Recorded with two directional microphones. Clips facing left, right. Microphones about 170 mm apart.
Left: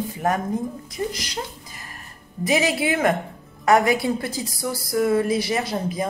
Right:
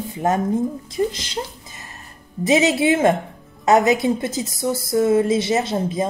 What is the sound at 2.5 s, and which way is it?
A woman's voice, 25° right (ahead or behind).